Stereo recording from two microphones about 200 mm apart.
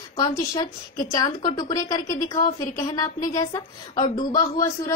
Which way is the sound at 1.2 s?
20° left (ahead or behind).